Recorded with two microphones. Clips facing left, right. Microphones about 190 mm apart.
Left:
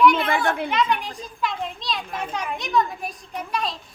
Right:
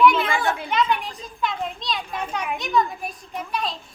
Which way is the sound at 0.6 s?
Centre (ahead or behind).